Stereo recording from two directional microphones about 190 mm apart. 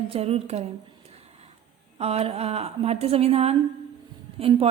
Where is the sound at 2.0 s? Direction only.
30° right (ahead or behind).